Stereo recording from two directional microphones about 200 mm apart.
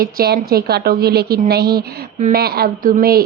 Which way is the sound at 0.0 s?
50° right (ahead or behind).